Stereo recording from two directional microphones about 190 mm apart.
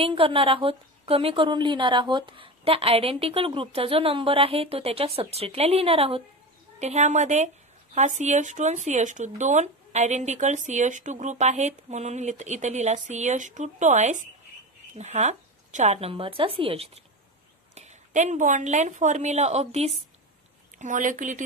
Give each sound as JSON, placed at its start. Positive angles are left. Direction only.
{"t": 0.0, "sound": "a woman's voice", "side_deg": -30}